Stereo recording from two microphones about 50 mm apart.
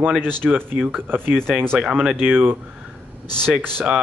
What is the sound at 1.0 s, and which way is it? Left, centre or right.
Speech, right.